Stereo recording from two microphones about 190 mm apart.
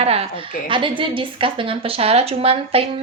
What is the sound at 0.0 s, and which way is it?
Speech, 30° right (ahead or behind).